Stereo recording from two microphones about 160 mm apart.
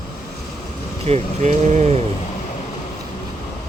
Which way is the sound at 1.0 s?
45° right (ahead or behind).